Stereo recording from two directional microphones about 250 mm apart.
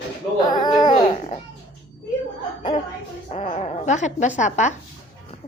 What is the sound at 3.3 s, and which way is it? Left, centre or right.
A woman's voice, left.